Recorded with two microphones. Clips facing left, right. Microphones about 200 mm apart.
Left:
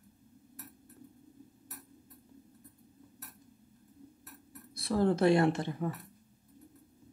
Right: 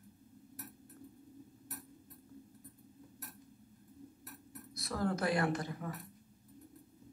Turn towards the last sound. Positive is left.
turn(degrees=25)  # may be behind; listen again after turning